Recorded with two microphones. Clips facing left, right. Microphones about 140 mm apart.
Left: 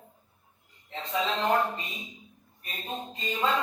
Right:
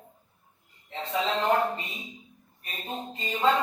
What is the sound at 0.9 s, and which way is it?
Speech, 30° right (ahead or behind).